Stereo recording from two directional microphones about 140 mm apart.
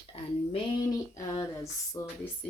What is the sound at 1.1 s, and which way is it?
Speech, 25° left (ahead or behind).